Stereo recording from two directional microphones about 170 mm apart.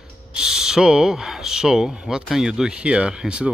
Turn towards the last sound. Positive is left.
turn(degrees=-5)  # may be behind; listen again after turning